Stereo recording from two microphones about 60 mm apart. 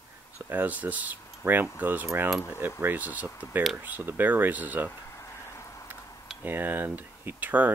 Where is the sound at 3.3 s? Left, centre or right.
Left.